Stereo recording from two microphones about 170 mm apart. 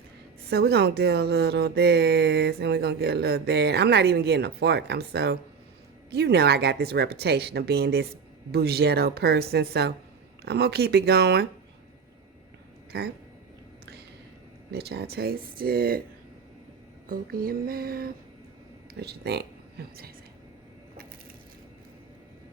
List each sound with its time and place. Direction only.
0.5 s speech: 70° right (ahead or behind)
12.9 s speech: 75° right (ahead or behind)
14.7 s speech: 75° right (ahead or behind)
17.1 s speech: 60° right (ahead or behind)
18.9 s speech: 75° right (ahead or behind)